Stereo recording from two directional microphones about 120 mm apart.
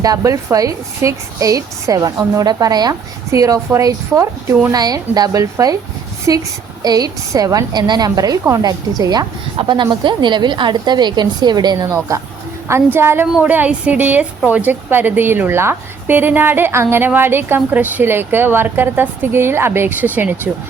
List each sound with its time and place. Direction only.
0.0 s a woman's voice: 30° right (ahead or behind)
12.6 s a woman's voice: 20° right (ahead or behind)